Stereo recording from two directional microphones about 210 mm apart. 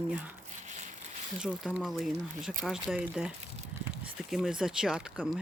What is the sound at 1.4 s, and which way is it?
Speech, 5° right (ahead or behind).